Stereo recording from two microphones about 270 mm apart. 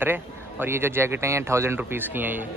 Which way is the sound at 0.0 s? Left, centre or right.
Centre.